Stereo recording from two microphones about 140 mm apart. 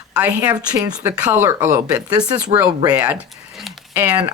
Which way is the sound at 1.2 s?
15° right (ahead or behind).